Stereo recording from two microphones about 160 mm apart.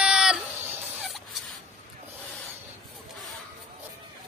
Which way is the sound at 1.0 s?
Centre (ahead or behind).